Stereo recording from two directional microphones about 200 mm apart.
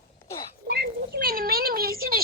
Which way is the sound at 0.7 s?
55° right (ahead or behind).